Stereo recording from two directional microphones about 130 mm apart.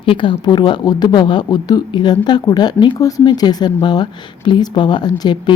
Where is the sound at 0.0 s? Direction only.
40° left (ahead or behind).